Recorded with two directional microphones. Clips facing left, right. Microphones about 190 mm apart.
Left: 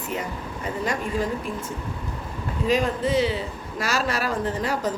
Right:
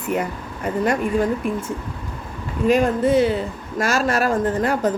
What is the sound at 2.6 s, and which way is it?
A woman's voice, 55° right (ahead or behind).